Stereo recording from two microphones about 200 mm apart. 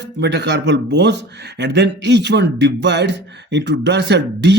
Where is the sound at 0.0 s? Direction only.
60° right (ahead or behind).